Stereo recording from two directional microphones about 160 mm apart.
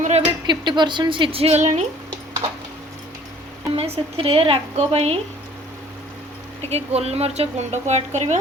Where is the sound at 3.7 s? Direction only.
40° right (ahead or behind).